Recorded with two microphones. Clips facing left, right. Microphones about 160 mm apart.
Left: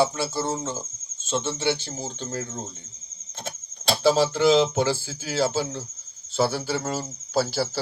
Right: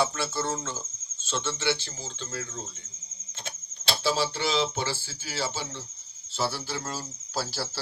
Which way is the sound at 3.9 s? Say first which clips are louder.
Left 7 dB; 45° left (ahead or behind).